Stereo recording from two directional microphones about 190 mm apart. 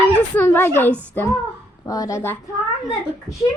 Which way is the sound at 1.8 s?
20° left (ahead or behind).